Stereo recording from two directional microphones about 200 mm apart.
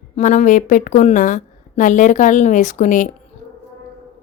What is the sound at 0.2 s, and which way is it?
A woman's voice, 40° left (ahead or behind).